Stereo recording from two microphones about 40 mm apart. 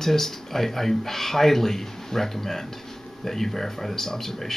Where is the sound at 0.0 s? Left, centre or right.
Centre.